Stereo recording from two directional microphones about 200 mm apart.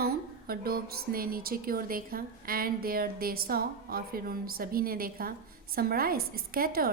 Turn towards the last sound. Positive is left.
turn(degrees=-45)  # may be behind; listen again after turning